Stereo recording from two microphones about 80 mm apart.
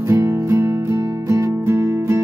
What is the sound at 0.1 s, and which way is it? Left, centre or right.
Music, right.